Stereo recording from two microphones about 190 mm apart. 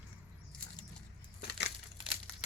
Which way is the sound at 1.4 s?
60° left (ahead or behind).